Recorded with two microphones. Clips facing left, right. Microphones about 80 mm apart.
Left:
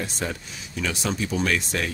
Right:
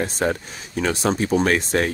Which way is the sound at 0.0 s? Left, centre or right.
Right.